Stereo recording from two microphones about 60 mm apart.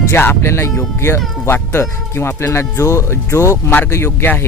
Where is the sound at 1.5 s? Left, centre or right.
Left.